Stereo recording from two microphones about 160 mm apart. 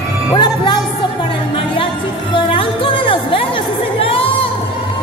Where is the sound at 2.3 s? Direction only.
35° left (ahead or behind).